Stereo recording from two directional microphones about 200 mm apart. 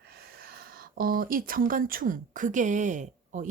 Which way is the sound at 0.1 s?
50° right (ahead or behind).